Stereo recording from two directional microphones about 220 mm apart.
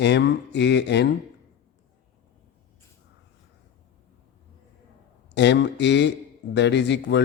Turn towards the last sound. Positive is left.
turn(degrees=50)  # may be behind; listen again after turning